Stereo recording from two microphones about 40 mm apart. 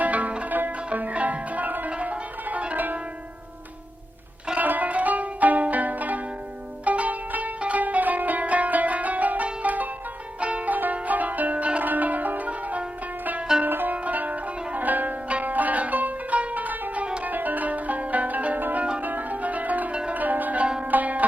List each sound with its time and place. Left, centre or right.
0.0 s music: right
2.7 s music: right
4.5 s music: right
11.8 s music: right
13.7 s music: right
13.9 s music: right
19.0 s zither: right
19.9 s music: right
20.1 s zither: right
20.8 s sitar: right